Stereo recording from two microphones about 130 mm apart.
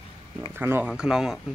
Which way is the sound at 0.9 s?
5° right (ahead or behind).